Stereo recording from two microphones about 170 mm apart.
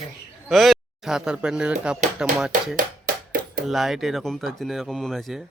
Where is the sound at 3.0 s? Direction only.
55° right (ahead or behind).